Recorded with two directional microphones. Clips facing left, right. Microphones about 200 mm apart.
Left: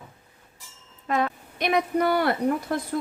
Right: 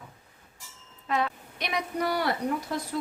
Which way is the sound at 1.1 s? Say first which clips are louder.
Left 3 dB; 50° left (ahead or behind).